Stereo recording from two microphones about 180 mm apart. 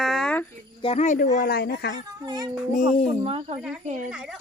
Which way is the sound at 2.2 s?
20° right (ahead or behind).